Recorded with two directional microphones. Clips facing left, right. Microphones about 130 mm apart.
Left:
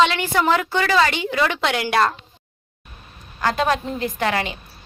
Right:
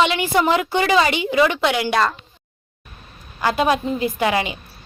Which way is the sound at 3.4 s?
10° right (ahead or behind).